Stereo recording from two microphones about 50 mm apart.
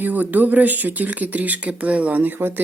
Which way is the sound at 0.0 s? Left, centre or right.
Right.